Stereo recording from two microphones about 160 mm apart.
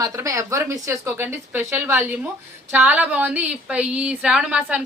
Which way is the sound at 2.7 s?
10° right (ahead or behind).